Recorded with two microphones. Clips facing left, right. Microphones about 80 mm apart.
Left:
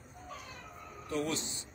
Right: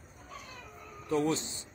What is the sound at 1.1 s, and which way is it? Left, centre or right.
Speech, right.